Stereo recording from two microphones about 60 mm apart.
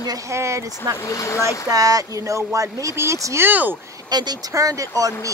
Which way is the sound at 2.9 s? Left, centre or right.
Right.